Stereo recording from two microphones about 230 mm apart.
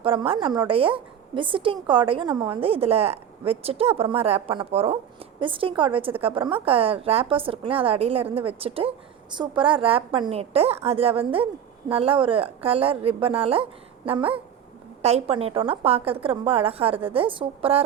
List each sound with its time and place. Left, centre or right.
0.0 s a woman's voice: right
15.0 s a woman's voice: right